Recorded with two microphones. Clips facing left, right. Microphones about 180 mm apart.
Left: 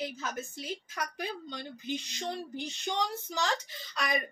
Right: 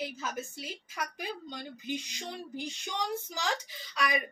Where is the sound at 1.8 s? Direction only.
10° right (ahead or behind).